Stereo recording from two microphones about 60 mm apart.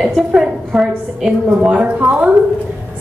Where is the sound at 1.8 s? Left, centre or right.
Right.